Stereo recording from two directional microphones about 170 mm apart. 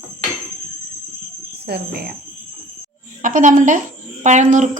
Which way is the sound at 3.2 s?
50° right (ahead or behind).